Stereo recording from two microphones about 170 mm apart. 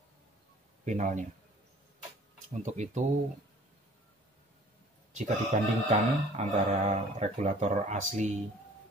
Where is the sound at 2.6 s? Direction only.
45° right (ahead or behind).